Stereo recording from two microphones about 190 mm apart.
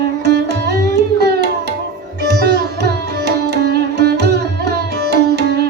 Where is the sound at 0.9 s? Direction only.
60° right (ahead or behind).